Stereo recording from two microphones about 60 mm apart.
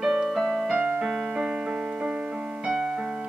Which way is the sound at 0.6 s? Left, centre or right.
Centre.